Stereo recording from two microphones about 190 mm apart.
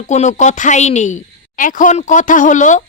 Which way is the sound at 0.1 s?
40° left (ahead or behind).